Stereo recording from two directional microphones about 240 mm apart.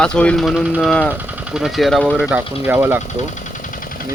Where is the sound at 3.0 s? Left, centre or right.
Left.